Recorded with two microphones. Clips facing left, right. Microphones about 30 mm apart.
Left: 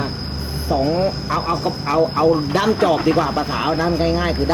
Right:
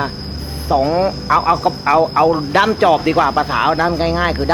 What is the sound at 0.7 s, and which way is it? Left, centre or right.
Speech, centre.